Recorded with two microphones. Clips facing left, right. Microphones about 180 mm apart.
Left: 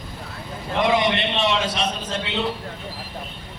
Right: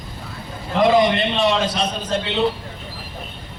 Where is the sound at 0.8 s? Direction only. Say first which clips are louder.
Right 5 dB; 35° right (ahead or behind).